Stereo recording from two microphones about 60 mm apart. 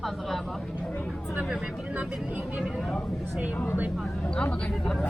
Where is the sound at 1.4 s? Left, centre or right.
Centre.